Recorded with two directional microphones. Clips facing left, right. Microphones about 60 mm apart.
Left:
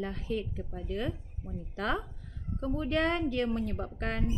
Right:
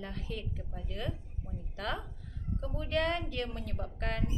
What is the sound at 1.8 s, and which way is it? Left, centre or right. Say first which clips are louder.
A woman's voice: left 5 dB; left.